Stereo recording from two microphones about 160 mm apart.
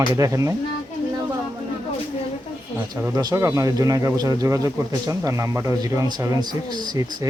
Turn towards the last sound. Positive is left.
turn(degrees=-25)  # may be behind; listen again after turning